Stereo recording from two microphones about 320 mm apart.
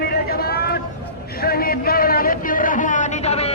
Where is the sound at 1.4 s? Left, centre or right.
Left.